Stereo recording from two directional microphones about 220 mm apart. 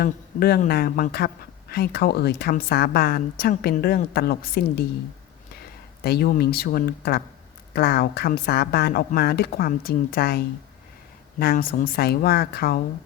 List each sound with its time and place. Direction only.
0.0 s a woman's voice: 45° left (ahead or behind)
6.0 s a woman's voice: 45° left (ahead or behind)